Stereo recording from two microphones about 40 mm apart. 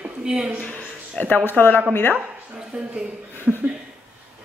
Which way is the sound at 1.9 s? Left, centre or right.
Left.